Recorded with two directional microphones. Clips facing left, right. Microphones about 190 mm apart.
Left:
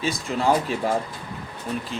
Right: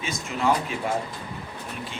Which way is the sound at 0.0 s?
35° left (ahead or behind).